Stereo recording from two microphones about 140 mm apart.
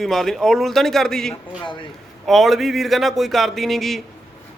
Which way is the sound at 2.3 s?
Centre (ahead or behind).